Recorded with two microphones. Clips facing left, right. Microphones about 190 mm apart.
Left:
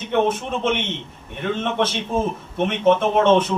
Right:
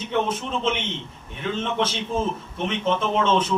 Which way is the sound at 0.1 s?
60° left (ahead or behind).